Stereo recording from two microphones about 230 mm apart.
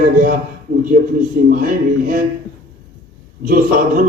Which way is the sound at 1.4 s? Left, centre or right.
Right.